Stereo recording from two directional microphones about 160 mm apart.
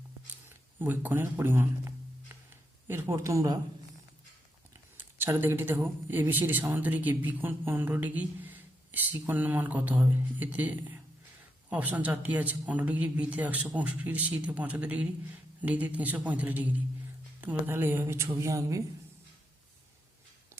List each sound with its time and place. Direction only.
0.4 s speech: 10° right (ahead or behind)
4.7 s speech: 15° right (ahead or behind)